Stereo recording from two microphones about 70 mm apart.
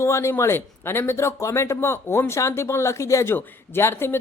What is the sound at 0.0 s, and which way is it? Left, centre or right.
Speech, left.